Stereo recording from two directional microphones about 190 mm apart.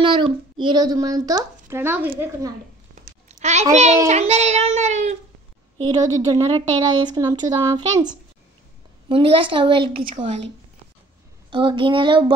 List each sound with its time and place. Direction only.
0.0 s a child's voice: 25° right (ahead or behind)
3.3 s babbling: 35° right (ahead or behind)
3.7 s child singing: 35° right (ahead or behind)
5.9 s a child's voice: 20° right (ahead or behind)
9.1 s a child's voice: 30° right (ahead or behind)
11.5 s a child's voice: 25° right (ahead or behind)